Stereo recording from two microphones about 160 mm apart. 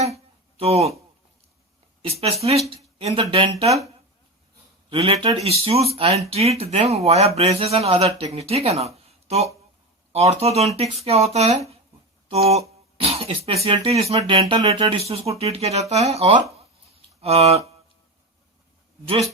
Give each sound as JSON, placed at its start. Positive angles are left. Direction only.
{"t": 0.6, "sound": "speech", "side_deg": -40}
{"t": 2.0, "sound": "speech", "side_deg": -40}
{"t": 4.9, "sound": "speech", "side_deg": -35}
{"t": 13.0, "sound": "throat clearing", "side_deg": -40}
{"t": 13.8, "sound": "speech", "side_deg": -40}